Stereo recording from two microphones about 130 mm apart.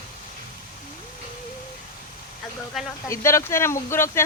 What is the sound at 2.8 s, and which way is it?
Fowl, centre (ahead or behind).